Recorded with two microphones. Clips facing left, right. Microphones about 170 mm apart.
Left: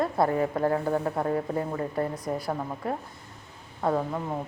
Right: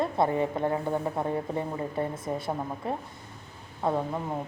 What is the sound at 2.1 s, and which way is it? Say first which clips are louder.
Speech: left 1 dB; 25° right (ahead or behind).